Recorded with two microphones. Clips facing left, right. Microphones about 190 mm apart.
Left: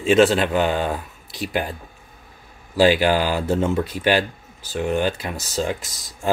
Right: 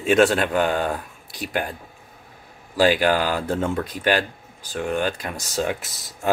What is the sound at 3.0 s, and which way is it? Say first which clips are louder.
Speech: left 1 dB; 5° left (ahead or behind).